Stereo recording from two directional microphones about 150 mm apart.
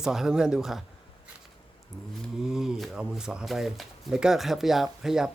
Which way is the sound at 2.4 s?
5° right (ahead or behind).